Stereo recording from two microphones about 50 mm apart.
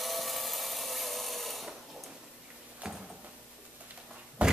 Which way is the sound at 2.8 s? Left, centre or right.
Centre.